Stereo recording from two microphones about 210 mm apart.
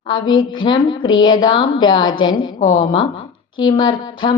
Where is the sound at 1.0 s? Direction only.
70° left (ahead or behind).